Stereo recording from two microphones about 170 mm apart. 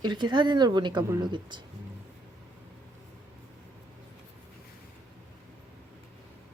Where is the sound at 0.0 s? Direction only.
25° right (ahead or behind).